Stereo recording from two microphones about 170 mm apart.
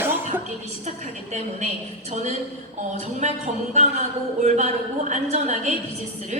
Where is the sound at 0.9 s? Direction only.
40° right (ahead or behind).